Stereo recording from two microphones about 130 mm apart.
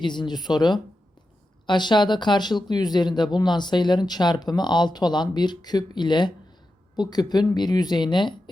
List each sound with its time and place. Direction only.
0.0 s speech: 35° left (ahead or behind)